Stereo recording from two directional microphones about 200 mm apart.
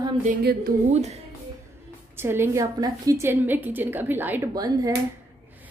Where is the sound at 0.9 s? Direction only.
35° right (ahead or behind).